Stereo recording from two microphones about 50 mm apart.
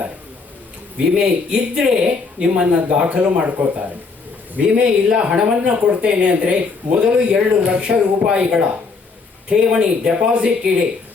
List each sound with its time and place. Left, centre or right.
1.1 s speech: centre